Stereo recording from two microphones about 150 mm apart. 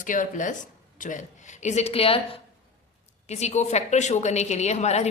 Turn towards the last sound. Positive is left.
turn(degrees=50)  # may be behind; listen again after turning